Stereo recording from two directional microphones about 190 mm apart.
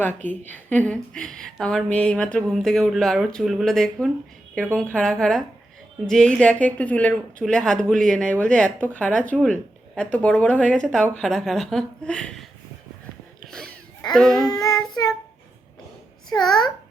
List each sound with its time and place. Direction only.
0.0 s a woman's voice: 10° left (ahead or behind)
13.5 s a sound: 5° left (ahead or behind)
14.1 s a woman's voice: centre (ahead or behind)
14.5 s singing: 20° left (ahead or behind)